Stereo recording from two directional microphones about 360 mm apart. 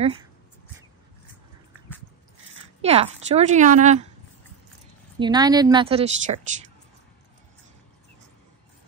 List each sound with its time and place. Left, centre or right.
2.8 s a woman's voice: centre
5.2 s speech: centre